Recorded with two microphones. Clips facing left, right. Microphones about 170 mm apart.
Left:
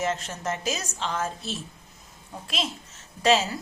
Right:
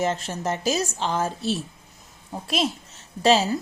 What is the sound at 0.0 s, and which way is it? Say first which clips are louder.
A woman's voice: right 3 dB; 30° right (ahead or behind).